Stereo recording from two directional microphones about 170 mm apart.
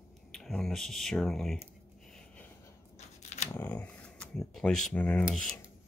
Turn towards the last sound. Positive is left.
turn(degrees=0)  # may be behind; listen again after turning